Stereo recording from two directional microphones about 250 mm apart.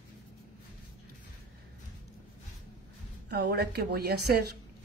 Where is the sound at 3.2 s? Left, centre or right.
Right.